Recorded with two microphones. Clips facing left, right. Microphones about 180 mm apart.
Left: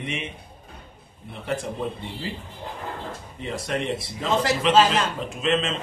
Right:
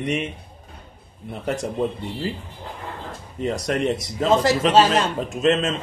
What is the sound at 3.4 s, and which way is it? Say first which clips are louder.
A man's voice: right 6 dB; 40° right (ahead or behind).